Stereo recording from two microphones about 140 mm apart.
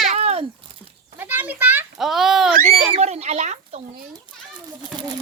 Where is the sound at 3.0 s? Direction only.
50° right (ahead or behind).